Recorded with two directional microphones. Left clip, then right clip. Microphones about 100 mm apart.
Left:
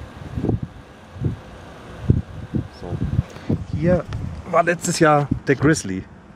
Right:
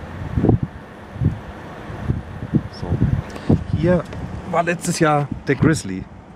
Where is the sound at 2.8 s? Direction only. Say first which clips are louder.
Right 4 dB; 15° right (ahead or behind).